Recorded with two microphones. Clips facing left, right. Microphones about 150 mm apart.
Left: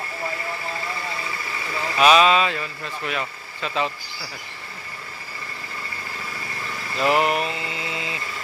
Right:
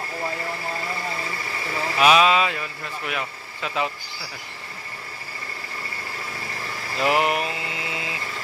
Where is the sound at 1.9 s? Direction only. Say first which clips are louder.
Left 1 dB; 5° right (ahead or behind).